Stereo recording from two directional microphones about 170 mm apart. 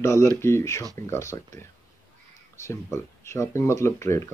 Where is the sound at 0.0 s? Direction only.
15° left (ahead or behind).